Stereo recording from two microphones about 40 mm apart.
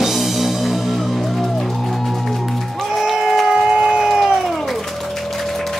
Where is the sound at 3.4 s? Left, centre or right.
Centre.